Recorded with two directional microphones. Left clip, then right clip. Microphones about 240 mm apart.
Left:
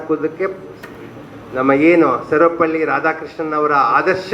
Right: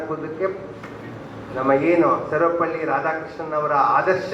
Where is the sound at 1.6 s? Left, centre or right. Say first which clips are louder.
Left 5 dB; left.